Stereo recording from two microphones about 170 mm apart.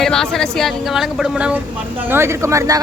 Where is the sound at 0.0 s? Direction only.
5° left (ahead or behind).